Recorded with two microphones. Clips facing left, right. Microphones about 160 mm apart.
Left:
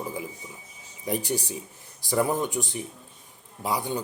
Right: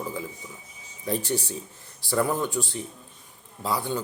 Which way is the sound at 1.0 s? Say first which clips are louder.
Right 1 dB; 15° left (ahead or behind).